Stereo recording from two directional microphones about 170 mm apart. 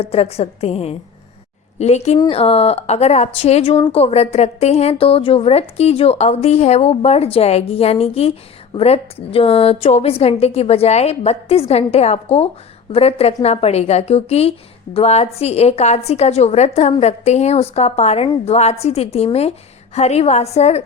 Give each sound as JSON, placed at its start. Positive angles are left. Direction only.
{"t": 0.0, "sound": "a woman's voice", "side_deg": 35}
{"t": 2.1, "sound": "speech", "side_deg": 25}
{"t": 2.4, "sound": "a woman's voice", "side_deg": 35}